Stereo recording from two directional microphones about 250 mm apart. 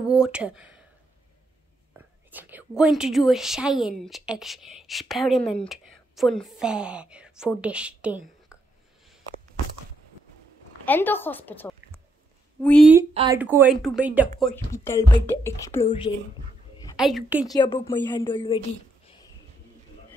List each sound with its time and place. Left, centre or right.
0.1 s a sound: centre
2.0 s speech: centre
8.5 s a sound: centre
10.9 s speech: centre
13.1 s speech: centre
13.4 s speech: centre
14.5 s speech: centre
16.9 s speech: centre
17.5 s a woman's voice: centre